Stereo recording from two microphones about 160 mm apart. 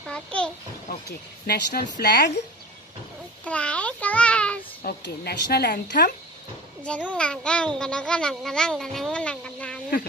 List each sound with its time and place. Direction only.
0.0 s a child's voice: 5° left (ahead or behind)
1.5 s a woman's voice: 75° left (ahead or behind)
3.4 s a child's voice: 5° left (ahead or behind)
4.8 s speech: 85° left
7.1 s a child's voice: 5° left (ahead or behind)